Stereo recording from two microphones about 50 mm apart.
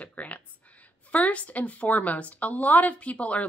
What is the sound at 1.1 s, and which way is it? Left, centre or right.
A woman's voice, left.